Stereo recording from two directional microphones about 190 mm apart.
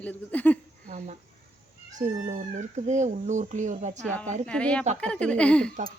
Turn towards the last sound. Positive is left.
turn(degrees=5)  # may be behind; listen again after turning